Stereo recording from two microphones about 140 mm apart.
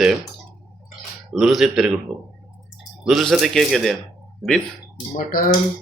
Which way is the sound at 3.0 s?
Centre (ahead or behind).